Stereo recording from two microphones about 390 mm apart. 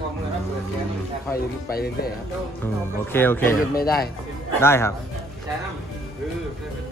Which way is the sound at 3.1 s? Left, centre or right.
Centre.